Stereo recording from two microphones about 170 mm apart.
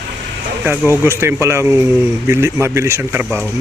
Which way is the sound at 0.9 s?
15° right (ahead or behind).